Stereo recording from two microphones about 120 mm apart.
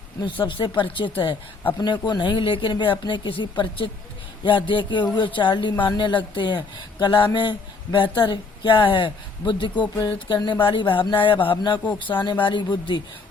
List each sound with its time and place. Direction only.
0.2 s speech: 40° left (ahead or behind)